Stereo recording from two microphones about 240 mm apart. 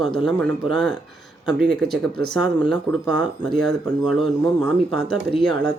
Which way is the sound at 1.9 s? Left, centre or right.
Right.